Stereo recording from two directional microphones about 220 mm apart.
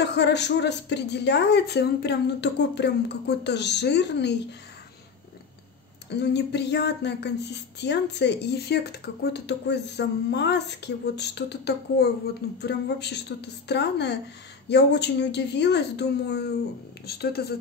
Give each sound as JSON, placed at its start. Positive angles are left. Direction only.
{"t": 0.0, "sound": "speech", "side_deg": 50}
{"t": 6.0, "sound": "speech", "side_deg": 50}